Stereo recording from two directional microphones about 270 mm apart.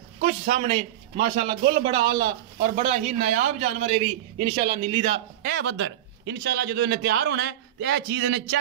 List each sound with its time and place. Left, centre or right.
0.2 s a man's voice: right
5.4 s a man's voice: right